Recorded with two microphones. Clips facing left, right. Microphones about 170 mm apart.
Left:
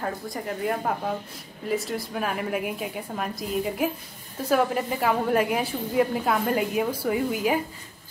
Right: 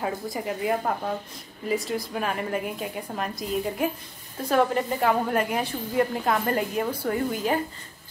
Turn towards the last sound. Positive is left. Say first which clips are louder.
# left 1 dB
turn(degrees=10)  # may be behind; listen again after turning